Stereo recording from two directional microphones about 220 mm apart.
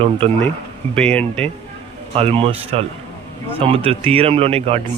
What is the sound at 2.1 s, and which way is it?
Speech, 25° right (ahead or behind).